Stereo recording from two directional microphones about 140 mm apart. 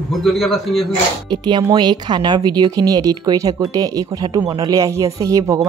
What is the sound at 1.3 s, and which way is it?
Speech, 30° right (ahead or behind).